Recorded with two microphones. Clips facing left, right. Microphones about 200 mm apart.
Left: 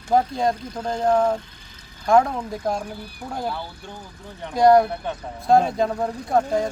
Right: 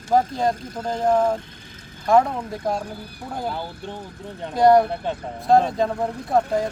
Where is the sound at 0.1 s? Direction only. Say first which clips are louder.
Even; centre (ahead or behind).